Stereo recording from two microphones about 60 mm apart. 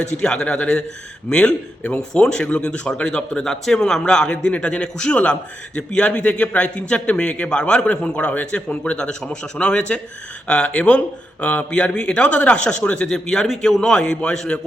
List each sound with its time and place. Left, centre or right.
0.2 s a man's voice: centre